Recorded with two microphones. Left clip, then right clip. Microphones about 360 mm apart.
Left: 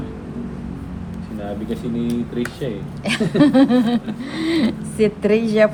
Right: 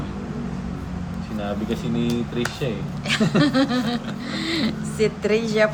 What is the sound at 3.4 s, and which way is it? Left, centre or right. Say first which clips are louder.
Speech: left 10 dB; centre.